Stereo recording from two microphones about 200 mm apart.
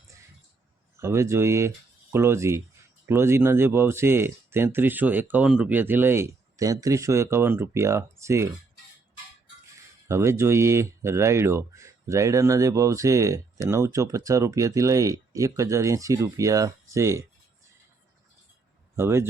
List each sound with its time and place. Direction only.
0.9 s speech: 15° right (ahead or behind)
10.1 s speech: 15° right (ahead or behind)
18.9 s speech: 15° right (ahead or behind)